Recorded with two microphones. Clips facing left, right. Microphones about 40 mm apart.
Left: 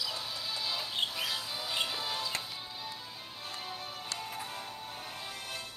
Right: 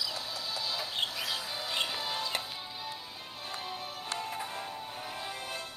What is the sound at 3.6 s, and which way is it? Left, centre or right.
Music, centre.